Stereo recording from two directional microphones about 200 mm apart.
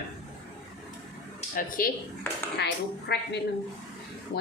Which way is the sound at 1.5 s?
45° left (ahead or behind).